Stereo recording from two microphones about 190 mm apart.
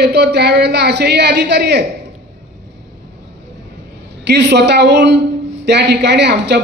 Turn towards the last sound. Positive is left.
turn(degrees=-65)  # may be behind; listen again after turning